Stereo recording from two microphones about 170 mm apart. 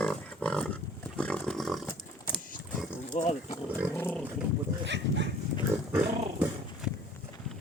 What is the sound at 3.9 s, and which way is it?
Roaring cats, 10° left (ahead or behind).